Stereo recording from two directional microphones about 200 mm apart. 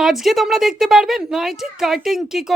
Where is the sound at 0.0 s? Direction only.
Centre (ahead or behind).